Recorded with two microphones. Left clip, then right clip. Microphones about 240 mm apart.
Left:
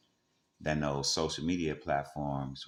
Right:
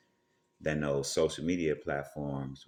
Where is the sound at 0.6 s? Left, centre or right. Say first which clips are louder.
Right 1 dB; centre.